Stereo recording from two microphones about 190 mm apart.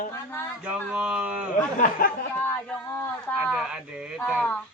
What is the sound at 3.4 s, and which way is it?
Speech, centre (ahead or behind).